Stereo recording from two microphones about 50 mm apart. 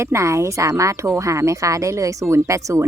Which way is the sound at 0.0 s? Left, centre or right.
Right.